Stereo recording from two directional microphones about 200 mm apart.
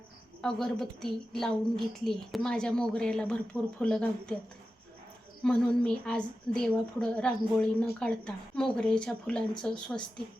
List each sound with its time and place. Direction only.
0.4 s a woman's voice: centre (ahead or behind)
5.4 s a woman's voice: 5° left (ahead or behind)